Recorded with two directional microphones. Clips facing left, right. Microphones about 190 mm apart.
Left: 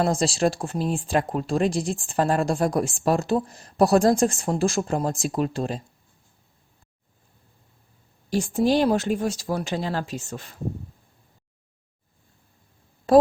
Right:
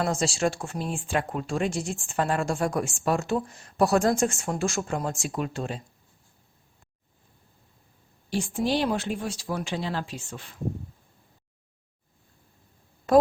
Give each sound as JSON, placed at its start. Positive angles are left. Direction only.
{"t": 0.0, "sound": "speech", "side_deg": 35}
{"t": 8.3, "sound": "speech", "side_deg": 40}
{"t": 13.1, "sound": "a woman's voice", "side_deg": 30}